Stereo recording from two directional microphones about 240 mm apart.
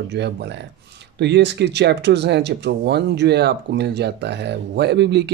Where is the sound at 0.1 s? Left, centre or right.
Right.